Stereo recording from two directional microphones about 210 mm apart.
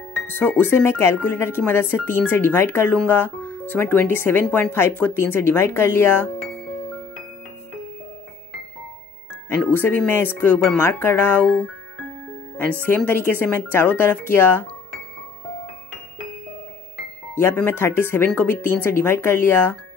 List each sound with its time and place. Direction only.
0.3 s speech: 10° left (ahead or behind)
9.5 s speech: 10° left (ahead or behind)
17.4 s speech: 10° left (ahead or behind)